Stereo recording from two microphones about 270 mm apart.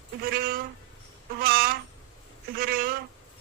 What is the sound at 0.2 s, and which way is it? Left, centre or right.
Speech, right.